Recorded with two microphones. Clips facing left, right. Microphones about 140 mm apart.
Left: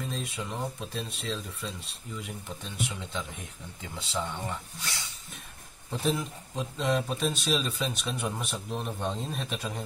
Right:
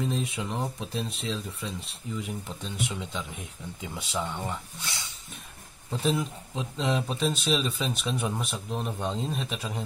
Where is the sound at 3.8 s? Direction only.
15° right (ahead or behind).